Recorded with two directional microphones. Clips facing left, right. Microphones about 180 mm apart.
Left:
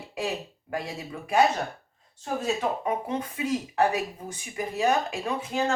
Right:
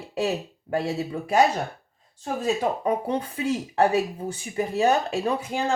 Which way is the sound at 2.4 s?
35° right (ahead or behind).